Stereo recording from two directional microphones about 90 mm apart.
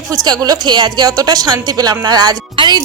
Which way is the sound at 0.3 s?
50° right (ahead or behind).